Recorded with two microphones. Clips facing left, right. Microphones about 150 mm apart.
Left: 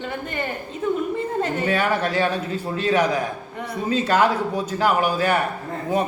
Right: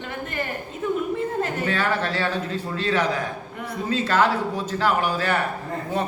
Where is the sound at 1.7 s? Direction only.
15° left (ahead or behind).